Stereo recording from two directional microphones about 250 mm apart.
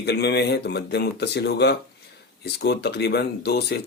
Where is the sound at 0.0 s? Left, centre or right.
Left.